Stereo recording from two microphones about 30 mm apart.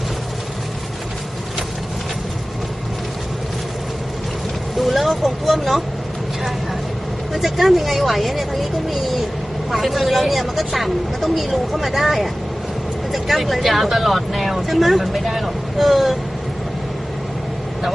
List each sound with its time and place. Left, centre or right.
4.8 s speech: centre
7.3 s speech: centre